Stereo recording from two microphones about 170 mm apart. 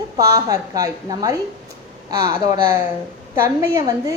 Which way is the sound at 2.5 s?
15° right (ahead or behind).